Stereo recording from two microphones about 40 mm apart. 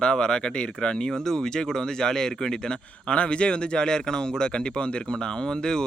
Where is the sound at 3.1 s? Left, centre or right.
Left.